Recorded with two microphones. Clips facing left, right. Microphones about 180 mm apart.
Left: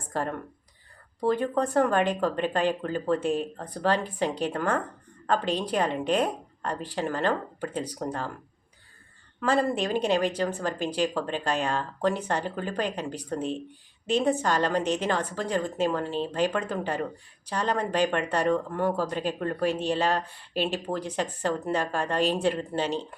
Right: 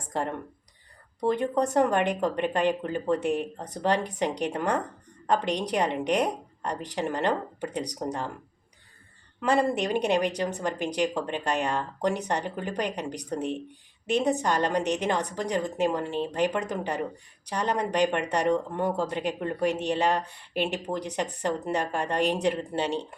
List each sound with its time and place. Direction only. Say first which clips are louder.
0.1 s a woman's voice: even; 20° right (ahead or behind)
9.4 s a woman's voice: right 1 dB; 20° right (ahead or behind)